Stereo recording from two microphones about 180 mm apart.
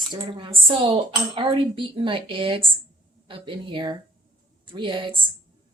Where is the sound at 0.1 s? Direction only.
25° right (ahead or behind).